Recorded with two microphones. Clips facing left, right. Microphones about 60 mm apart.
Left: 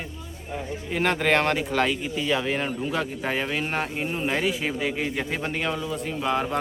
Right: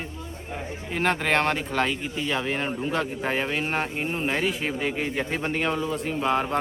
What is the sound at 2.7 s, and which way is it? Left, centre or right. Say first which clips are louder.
Speech: even; centre.